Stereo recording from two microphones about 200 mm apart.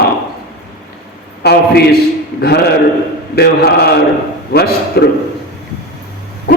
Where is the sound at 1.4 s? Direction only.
55° left (ahead or behind).